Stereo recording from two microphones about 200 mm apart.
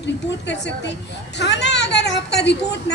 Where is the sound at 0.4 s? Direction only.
60° left (ahead or behind).